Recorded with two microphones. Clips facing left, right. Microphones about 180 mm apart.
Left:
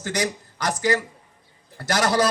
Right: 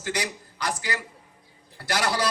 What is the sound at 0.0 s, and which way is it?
A man's voice, 45° left (ahead or behind).